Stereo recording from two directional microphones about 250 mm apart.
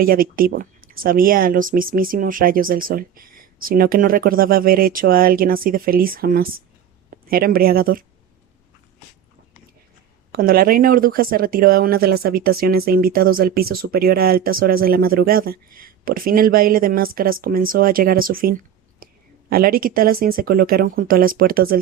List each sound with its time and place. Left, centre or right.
0.0 s speech: right
10.3 s speech: right